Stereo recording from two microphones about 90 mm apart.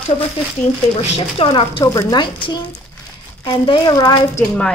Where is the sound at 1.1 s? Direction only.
85° left.